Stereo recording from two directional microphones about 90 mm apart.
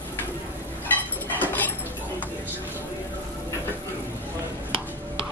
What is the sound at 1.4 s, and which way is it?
Dog, 20° left (ahead or behind).